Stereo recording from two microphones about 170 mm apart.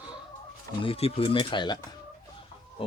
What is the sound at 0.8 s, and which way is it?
Speech, 35° left (ahead or behind).